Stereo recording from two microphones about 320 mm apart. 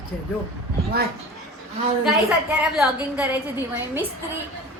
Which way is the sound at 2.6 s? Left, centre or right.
Centre.